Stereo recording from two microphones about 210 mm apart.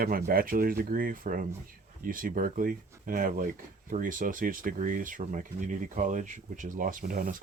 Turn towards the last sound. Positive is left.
turn(degrees=-40)  # may be behind; listen again after turning